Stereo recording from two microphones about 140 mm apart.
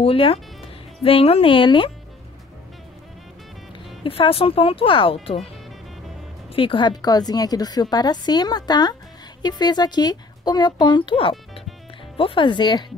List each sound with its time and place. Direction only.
0.0 s speech: 40° left (ahead or behind)
3.7 s speech: 35° left (ahead or behind)
6.5 s a woman's voice: 40° left (ahead or behind)